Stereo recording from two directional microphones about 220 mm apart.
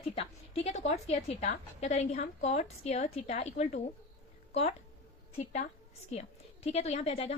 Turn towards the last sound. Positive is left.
turn(degrees=25)  # may be behind; listen again after turning